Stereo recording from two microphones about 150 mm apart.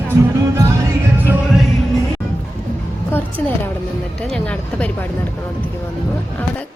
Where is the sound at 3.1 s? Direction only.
10° left (ahead or behind).